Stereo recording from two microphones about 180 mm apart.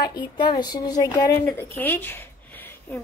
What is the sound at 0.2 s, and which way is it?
A woman's voice, 25° left (ahead or behind).